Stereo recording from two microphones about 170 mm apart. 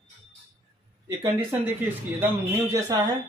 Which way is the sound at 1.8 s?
15° right (ahead or behind).